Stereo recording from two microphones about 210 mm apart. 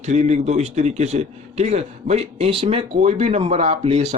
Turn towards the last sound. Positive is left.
turn(degrees=-30)  # may be behind; listen again after turning